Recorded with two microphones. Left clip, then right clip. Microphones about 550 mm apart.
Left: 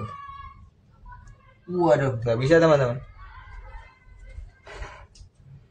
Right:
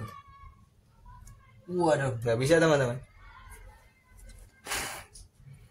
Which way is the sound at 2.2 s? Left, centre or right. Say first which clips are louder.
Left 3 dB; right.